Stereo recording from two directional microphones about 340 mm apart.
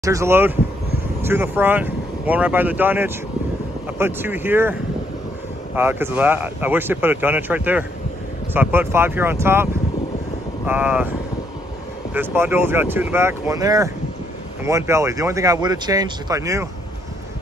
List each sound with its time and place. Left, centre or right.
0.0 s speech: centre
5.8 s speech: centre
12.1 s speech: centre